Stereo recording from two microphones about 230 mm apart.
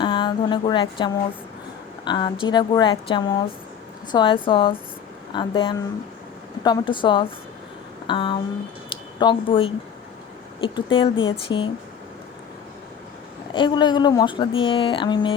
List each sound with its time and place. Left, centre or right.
0.0 s a sound: centre
2.0 s speech: centre
13.5 s speech: centre